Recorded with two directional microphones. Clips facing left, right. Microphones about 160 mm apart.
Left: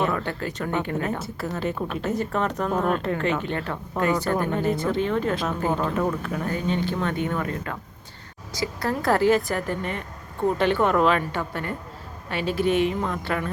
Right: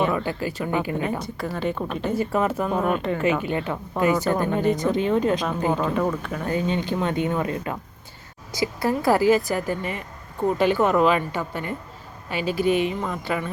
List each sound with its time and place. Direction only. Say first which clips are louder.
0.0 s a woman's voice: right 2 dB; 5° right (ahead or behind)
5.9 s a woman's voice: right 1 dB; centre (ahead or behind)
6.5 s a woman's voice: right 3 dB; 15° right (ahead or behind)